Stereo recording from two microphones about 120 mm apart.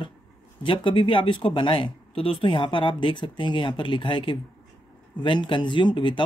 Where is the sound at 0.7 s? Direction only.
40° left (ahead or behind).